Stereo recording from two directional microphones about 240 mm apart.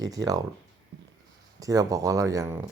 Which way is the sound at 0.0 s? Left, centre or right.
Centre.